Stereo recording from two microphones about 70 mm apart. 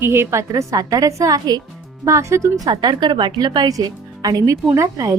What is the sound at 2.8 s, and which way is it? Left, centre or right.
A woman's voice, right.